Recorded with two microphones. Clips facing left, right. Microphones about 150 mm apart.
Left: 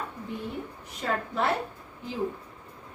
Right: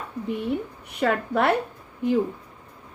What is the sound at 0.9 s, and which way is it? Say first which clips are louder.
Speech: right 8 dB; 65° right (ahead or behind).